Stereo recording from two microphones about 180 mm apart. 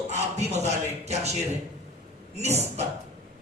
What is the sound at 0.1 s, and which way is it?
Speech, 40° right (ahead or behind).